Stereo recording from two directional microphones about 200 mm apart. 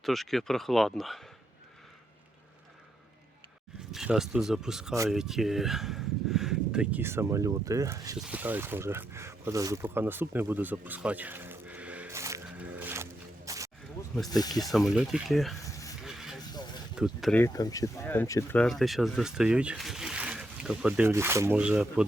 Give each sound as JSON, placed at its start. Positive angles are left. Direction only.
{"t": 0.0, "sound": "speech", "side_deg": 0}
{"t": 3.9, "sound": "speech", "side_deg": 0}
{"t": 8.2, "sound": "a sound", "side_deg": -5}
{"t": 14.3, "sound": "speech", "side_deg": 20}
{"t": 14.6, "sound": "speech", "side_deg": 0}
{"t": 16.0, "sound": "vehicle", "side_deg": 0}
{"t": 16.4, "sound": "a sound", "side_deg": 20}
{"t": 16.9, "sound": "speech", "side_deg": 0}
{"t": 17.4, "sound": "speech", "side_deg": 15}
{"t": 18.6, "sound": "speech", "side_deg": 0}